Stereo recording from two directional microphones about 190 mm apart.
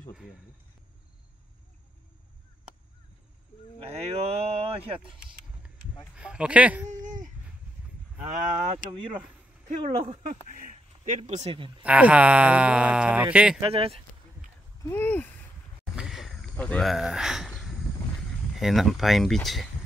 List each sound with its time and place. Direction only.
3.9 s speech: 30° right (ahead or behind)
6.1 s speech: 5° right (ahead or behind)
6.9 s a sound: 40° right (ahead or behind)
9.7 s speech: 35° right (ahead or behind)
11.8 s speech: 5° right (ahead or behind)
13.6 s speech: 30° right (ahead or behind)
14.8 s speech: 10° left (ahead or behind)
15.8 s a sound: centre (ahead or behind)
18.5 s speech: centre (ahead or behind)